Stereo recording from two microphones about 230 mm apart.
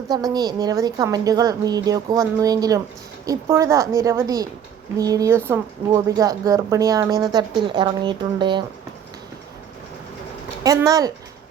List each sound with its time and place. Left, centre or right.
0.1 s speech: centre
10.6 s speech: centre